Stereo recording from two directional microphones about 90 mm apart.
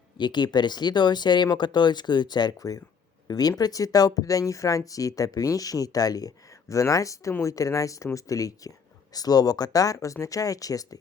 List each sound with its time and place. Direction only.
0.2 s speech: 55° left (ahead or behind); by 10.8 s 40° left (ahead or behind)